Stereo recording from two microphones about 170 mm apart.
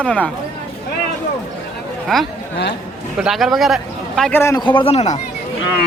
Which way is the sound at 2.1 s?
5° left (ahead or behind).